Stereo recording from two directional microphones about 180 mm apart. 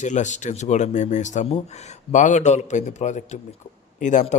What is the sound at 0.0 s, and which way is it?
Speech, 40° left (ahead or behind).